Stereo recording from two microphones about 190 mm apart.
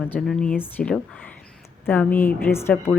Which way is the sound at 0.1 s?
Centre (ahead or behind).